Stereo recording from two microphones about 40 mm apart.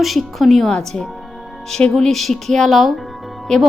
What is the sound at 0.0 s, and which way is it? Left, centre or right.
A woman's voice, centre.